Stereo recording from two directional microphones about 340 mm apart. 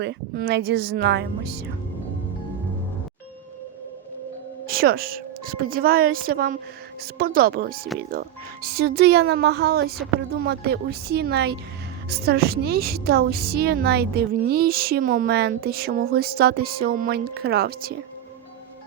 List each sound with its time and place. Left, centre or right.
0.0 s a woman's voice: right
4.6 s a woman's voice: right